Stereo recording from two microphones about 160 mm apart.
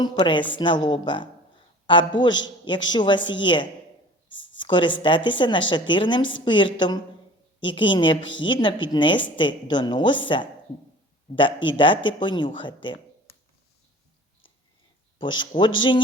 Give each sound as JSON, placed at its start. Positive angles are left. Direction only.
{"t": 0.0, "sound": "a woman's voice", "side_deg": 30}
{"t": 15.2, "sound": "a woman's voice", "side_deg": 30}